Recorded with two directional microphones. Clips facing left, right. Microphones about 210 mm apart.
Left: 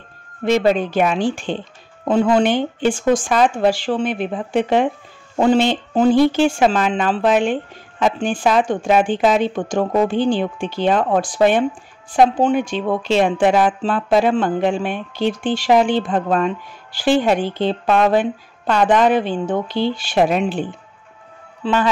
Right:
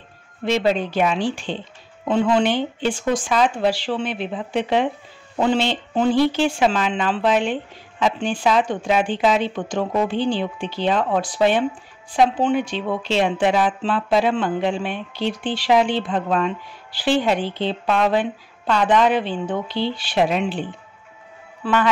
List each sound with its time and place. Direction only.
0.5 s speech: 50° left (ahead or behind)